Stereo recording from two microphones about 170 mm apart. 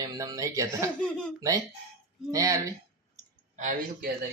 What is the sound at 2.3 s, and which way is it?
Speech, 20° right (ahead or behind).